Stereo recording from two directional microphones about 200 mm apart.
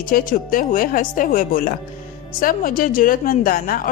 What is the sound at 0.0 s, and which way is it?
Speech, 45° left (ahead or behind).